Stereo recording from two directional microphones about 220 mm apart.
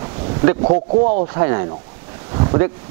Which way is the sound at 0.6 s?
30° right (ahead or behind).